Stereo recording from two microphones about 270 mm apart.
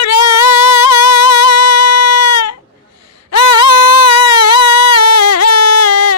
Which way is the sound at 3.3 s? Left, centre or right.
Left.